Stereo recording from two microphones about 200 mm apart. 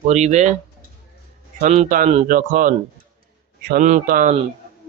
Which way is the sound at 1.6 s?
35° right (ahead or behind).